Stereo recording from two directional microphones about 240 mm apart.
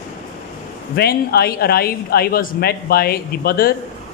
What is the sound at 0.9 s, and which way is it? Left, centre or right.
Speech, left.